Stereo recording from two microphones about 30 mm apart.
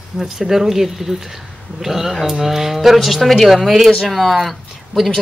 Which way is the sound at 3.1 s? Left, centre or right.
Centre.